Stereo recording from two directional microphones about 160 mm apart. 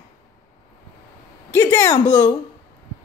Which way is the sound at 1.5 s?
20° left (ahead or behind).